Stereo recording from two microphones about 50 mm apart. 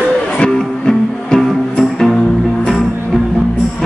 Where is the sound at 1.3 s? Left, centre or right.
Centre.